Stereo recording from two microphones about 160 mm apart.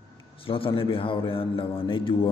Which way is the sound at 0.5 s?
35° left (ahead or behind).